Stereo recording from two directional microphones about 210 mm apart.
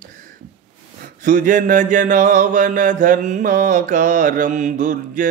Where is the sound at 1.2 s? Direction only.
35° right (ahead or behind).